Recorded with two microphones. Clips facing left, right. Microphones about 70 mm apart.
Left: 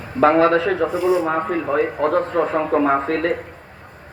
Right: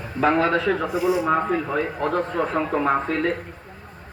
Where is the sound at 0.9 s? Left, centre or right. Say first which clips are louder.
Left 4 dB; centre.